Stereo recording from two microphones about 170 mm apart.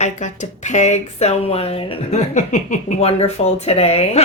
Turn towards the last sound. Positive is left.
turn(degrees=35)  # may be behind; listen again after turning